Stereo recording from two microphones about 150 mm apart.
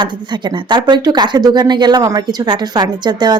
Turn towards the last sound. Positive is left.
turn(degrees=-30)  # may be behind; listen again after turning